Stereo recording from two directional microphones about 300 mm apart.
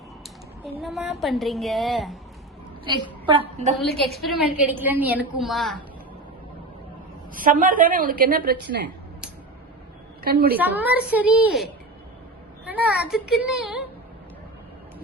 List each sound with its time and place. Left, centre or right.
0.8 s a woman's voice: centre
3.2 s a woman's voice: centre
3.8 s a woman's voice: centre
7.3 s a woman's voice: right
10.2 s a woman's voice: right
10.6 s a woman's voice: centre